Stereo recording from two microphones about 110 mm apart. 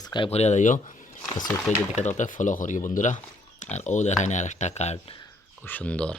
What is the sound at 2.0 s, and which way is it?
Speech, 90° left.